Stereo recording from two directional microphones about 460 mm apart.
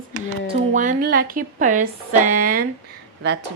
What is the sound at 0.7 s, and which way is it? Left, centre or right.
A woman's voice, centre.